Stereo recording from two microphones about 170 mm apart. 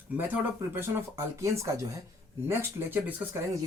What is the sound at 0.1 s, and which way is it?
Speech, 10° right (ahead or behind).